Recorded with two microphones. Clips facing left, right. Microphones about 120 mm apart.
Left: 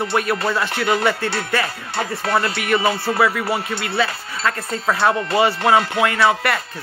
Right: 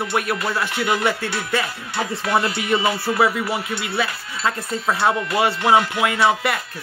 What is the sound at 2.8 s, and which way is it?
Speech, 35° left (ahead or behind).